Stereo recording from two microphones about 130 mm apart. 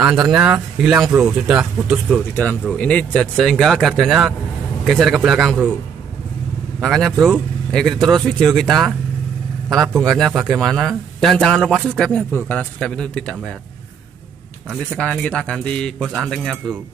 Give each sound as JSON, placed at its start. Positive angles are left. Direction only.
{"t": 0.0, "sound": "speech", "side_deg": -5}
{"t": 2.1, "sound": "a man's voice", "side_deg": 15}
{"t": 6.8, "sound": "a man's voice", "side_deg": 5}
{"t": 14.9, "sound": "a man's voice", "side_deg": 10}